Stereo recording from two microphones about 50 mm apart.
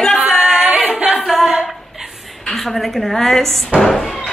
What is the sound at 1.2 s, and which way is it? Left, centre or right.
A woman's voice, centre.